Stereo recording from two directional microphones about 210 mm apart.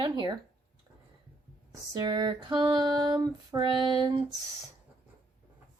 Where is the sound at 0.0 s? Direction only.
20° right (ahead or behind).